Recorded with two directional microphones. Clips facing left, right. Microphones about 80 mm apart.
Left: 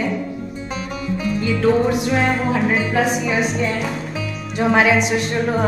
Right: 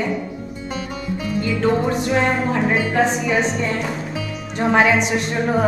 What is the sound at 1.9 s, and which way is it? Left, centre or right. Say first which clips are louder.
A woman's voice: even; centre.